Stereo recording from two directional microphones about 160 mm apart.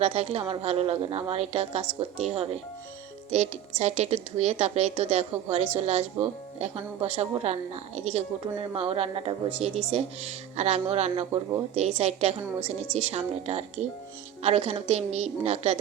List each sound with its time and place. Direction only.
0.0 s speech: 40° right (ahead or behind)